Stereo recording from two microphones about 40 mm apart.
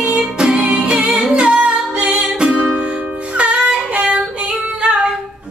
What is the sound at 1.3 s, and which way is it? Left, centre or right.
Singing, right.